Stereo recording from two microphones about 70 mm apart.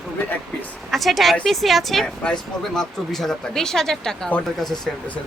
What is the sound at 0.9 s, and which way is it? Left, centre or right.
A woman's voice, centre.